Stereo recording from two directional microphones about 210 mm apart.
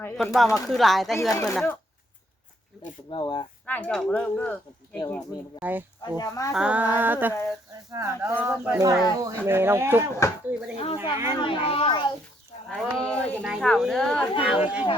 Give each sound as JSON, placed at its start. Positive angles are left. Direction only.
{"t": 0.0, "sound": "speech", "side_deg": 10}
{"t": 1.3, "sound": "speech", "side_deg": 15}
{"t": 3.1, "sound": "a child's voice", "side_deg": 25}
{"t": 3.7, "sound": "speech", "side_deg": 5}
{"t": 4.9, "sound": "speech", "side_deg": 15}
{"t": 5.5, "sound": "speech", "side_deg": -10}
{"t": 6.1, "sound": "speech", "side_deg": 15}
{"t": 6.5, "sound": "speech", "side_deg": -5}
{"t": 10.8, "sound": "a child's voice", "side_deg": 30}
{"t": 11.1, "sound": "speech", "side_deg": -10}
{"t": 11.3, "sound": "a child's voice", "side_deg": 25}
{"t": 12.6, "sound": "speech", "side_deg": 0}